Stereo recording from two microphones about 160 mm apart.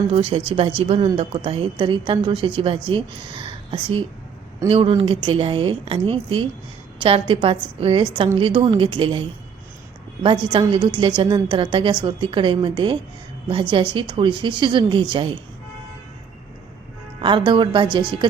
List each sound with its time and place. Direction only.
0.1 s a woman's voice: 35° right (ahead or behind)
10.2 s a woman's voice: 30° right (ahead or behind)
17.2 s a woman's voice: 30° right (ahead or behind)